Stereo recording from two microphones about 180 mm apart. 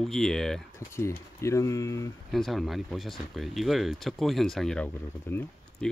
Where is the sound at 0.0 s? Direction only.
Centre (ahead or behind).